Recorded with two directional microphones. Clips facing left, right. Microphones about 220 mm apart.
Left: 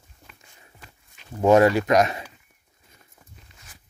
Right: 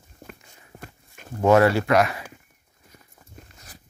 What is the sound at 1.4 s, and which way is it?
Speech, 15° left (ahead or behind).